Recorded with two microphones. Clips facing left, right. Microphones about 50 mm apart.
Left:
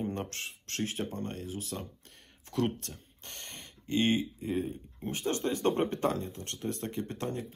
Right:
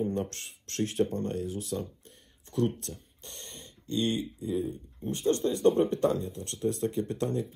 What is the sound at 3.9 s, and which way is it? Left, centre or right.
Speech, left.